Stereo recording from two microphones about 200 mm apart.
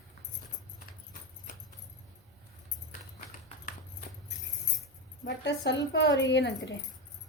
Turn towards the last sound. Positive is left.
turn(degrees=60)  # may be behind; listen again after turning